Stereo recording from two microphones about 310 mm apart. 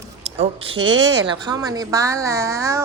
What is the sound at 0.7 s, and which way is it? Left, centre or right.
Speech, right.